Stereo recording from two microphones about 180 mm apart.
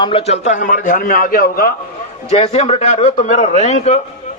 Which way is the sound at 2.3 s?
35° left (ahead or behind).